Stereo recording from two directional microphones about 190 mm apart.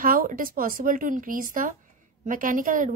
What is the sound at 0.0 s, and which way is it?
A woman's voice, 45° right (ahead or behind).